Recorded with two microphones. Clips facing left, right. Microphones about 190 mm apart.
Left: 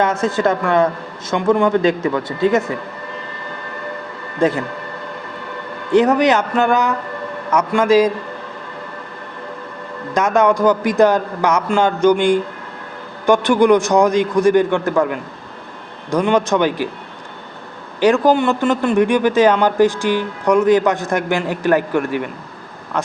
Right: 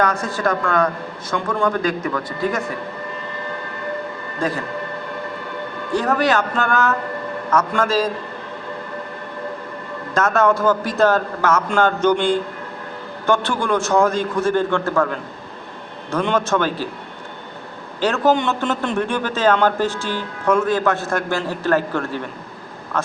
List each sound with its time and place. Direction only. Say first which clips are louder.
0.0 s a man's voice: left 4 dB; 25° left (ahead or behind)
4.4 s speech: left 7 dB; 25° left (ahead or behind)
5.9 s a man's voice: left 6 dB; 20° left (ahead or behind)
10.2 s a man's voice: left 3 dB; 15° left (ahead or behind)
18.0 s a man's voice: left 4 dB; 10° left (ahead or behind)